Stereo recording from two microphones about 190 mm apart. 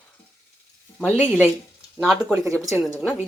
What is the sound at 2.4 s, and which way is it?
Speech, 15° right (ahead or behind).